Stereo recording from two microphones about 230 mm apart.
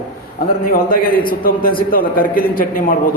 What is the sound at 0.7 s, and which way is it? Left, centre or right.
A man's voice, left.